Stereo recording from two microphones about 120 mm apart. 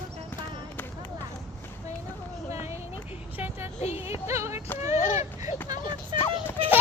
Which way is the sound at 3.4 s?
20° right (ahead or behind).